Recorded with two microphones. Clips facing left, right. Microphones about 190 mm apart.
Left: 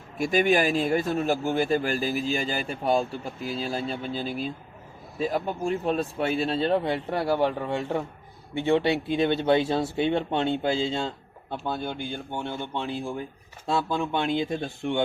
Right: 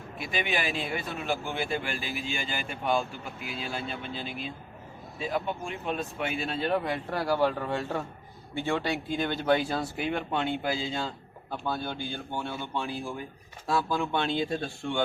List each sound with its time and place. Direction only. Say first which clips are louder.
0.2 s a man's voice: left 9 dB; 45° left (ahead or behind); by 15.0 s 20° left (ahead or behind)